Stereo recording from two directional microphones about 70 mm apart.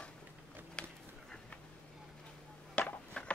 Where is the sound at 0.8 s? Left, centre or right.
Centre.